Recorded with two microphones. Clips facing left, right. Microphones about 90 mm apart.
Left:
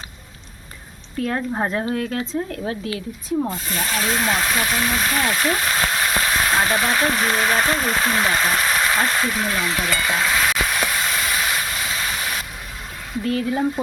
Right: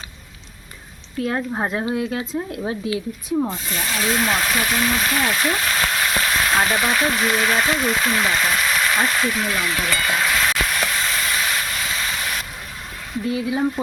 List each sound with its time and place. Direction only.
1.5 s speech: 5° right (ahead or behind)
3.5 s speech: 40° left (ahead or behind)
4.3 s speech: 20° left (ahead or behind)
4.7 s speech: 5° left (ahead or behind)
5.5 s a sound: 20° left (ahead or behind)
6.4 s frying: 10° left (ahead or behind)
6.9 s speech: 25° left (ahead or behind)
10.3 s vehicle: 10° left (ahead or behind)
13.2 s speech: 10° right (ahead or behind)